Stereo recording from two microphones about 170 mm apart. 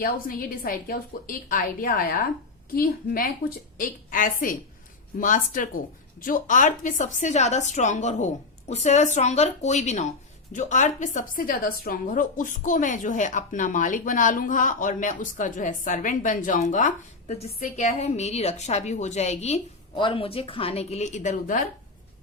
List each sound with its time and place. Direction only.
0.0 s a woman's voice: 60° left (ahead or behind)